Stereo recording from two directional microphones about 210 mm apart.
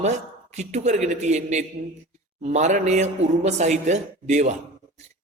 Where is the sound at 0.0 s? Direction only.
35° right (ahead or behind).